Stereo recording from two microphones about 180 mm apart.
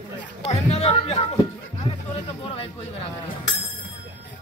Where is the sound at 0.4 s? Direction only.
35° left (ahead or behind).